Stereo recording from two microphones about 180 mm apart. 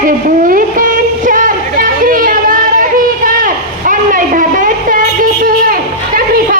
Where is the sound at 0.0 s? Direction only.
50° right (ahead or behind).